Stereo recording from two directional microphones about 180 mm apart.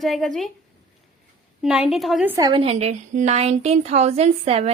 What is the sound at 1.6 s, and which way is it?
Speech, centre (ahead or behind).